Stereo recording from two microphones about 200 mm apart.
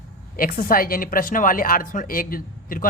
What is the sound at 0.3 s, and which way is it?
Speech, 45° left (ahead or behind).